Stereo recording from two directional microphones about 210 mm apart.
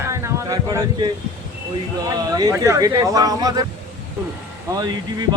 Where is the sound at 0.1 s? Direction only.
15° right (ahead or behind).